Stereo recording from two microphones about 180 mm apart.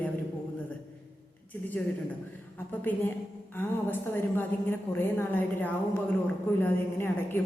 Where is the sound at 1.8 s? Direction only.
5° left (ahead or behind).